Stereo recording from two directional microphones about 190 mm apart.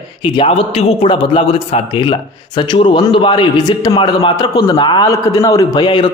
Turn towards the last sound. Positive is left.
turn(degrees=20)  # may be behind; listen again after turning